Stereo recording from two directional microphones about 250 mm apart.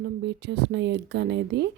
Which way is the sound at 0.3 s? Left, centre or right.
Right.